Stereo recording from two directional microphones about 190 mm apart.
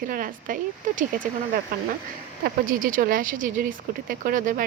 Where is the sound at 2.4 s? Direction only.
45° right (ahead or behind).